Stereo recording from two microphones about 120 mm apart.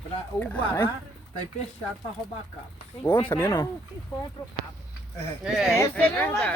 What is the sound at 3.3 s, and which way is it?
Speech, 20° left (ahead or behind).